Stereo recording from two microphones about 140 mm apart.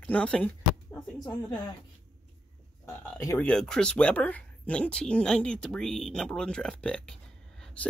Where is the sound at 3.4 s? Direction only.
5° left (ahead or behind).